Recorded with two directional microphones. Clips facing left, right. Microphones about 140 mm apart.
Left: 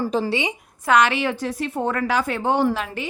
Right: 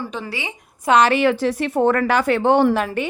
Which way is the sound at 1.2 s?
75° right (ahead or behind).